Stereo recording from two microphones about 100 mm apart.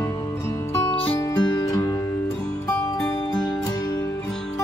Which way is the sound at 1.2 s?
45° left (ahead or behind).